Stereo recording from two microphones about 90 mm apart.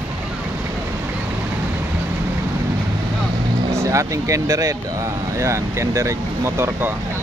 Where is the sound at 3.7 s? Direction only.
35° right (ahead or behind).